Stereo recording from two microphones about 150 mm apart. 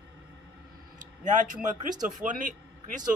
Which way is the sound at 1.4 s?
55° right (ahead or behind).